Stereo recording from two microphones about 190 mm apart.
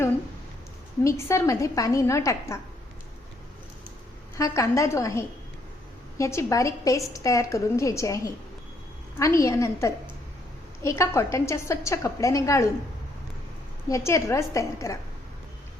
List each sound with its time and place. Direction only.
1.0 s a woman's voice: 15° left (ahead or behind)
4.4 s a woman's voice: 15° left (ahead or behind)
13.8 s a woman's voice: 15° left (ahead or behind)